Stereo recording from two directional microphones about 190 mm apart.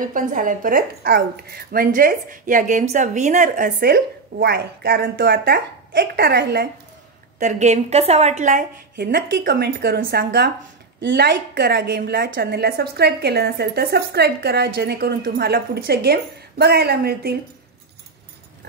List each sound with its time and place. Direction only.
0.0 s speech: 45° right (ahead or behind)
7.3 s a woman's voice: 40° right (ahead or behind); by 17.4 s 55° right (ahead or behind)